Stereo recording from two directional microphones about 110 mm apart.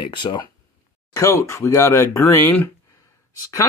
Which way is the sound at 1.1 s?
25° left (ahead or behind).